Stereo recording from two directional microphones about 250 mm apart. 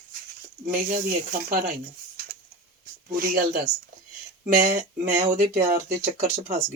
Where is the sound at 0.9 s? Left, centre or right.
Right.